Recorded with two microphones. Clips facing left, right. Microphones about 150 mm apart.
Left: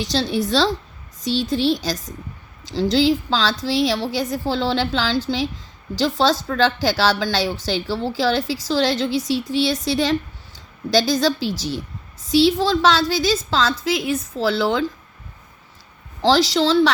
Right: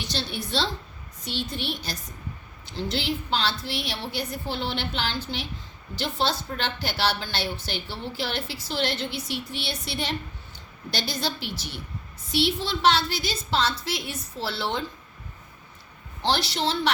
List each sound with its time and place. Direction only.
0.0 s a woman's voice: 90° left
16.2 s a woman's voice: 90° left